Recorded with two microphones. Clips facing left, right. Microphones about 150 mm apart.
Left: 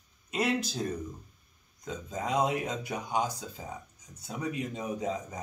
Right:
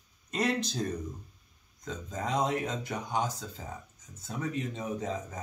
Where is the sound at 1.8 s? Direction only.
10° left (ahead or behind).